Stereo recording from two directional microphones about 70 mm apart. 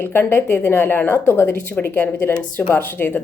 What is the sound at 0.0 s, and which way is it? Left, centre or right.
A woman's voice, left.